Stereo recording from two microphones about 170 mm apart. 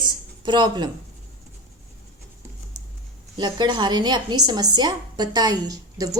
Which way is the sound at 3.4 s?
25° right (ahead or behind).